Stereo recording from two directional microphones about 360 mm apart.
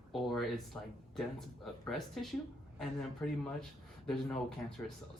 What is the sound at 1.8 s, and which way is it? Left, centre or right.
A woman's voice, centre.